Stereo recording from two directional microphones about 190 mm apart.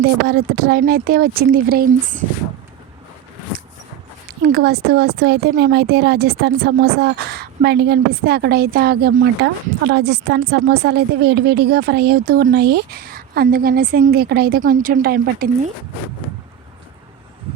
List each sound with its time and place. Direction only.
0.3 s speech: 55° right (ahead or behind)
4.3 s speech: 55° right (ahead or behind)